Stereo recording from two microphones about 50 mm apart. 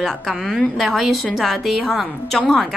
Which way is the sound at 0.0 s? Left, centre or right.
Centre.